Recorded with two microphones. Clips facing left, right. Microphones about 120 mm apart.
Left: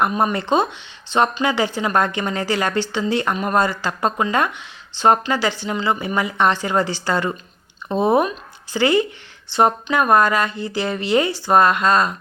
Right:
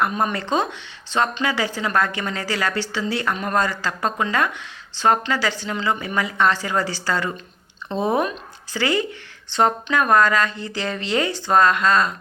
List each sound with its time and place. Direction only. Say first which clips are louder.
0.0 s a woman's voice: left 3 dB; 20° left (ahead or behind)